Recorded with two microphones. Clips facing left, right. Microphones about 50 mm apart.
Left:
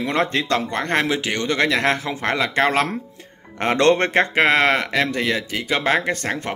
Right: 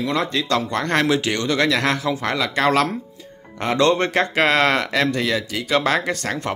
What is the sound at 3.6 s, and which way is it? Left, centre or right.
Speech, left.